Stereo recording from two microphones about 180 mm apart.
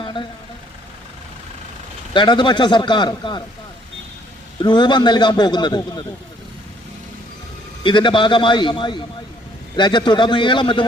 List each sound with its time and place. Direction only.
0.0 s vehicle: 25° left (ahead or behind)
2.1 s a man's voice: 25° left (ahead or behind)
4.6 s a man's voice: 25° left (ahead or behind)
7.9 s a man's voice: 25° left (ahead or behind)